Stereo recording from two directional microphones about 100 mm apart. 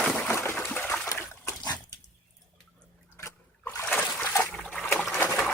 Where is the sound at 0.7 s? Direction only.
20° left (ahead or behind).